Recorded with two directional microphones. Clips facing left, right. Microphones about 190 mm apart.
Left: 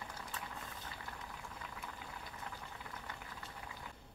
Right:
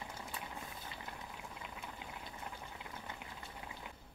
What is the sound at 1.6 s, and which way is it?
Boiling, 20° right (ahead or behind).